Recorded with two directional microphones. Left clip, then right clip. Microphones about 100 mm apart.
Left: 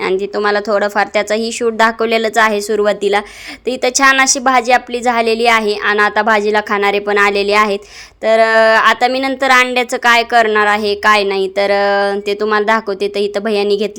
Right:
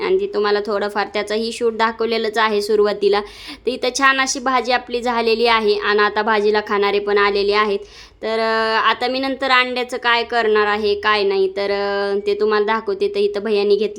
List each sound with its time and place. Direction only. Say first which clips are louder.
0.2 s a woman's voice: left 3 dB; 35° left (ahead or behind)
2.6 s a woman's voice: left 2 dB; 20° left (ahead or behind)
4.0 s a woman's voice: left 6 dB; 40° left (ahead or behind)